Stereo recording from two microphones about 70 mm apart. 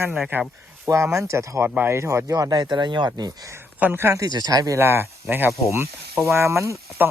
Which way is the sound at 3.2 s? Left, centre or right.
Right.